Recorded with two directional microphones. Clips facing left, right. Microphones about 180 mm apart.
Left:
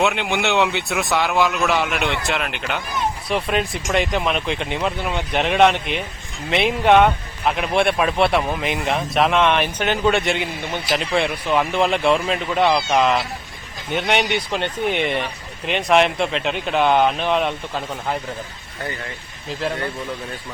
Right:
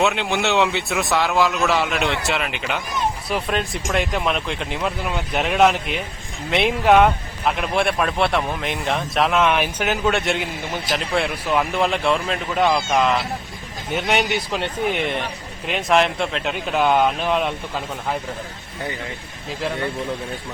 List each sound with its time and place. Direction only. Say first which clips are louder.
0.0 s a man's voice: even; centre (ahead or behind)